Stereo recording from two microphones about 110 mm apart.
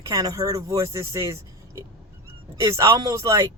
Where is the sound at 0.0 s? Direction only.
35° right (ahead or behind).